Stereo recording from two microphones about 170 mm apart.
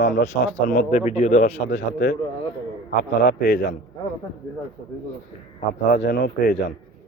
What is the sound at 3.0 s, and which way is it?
Speech, 70° left (ahead or behind).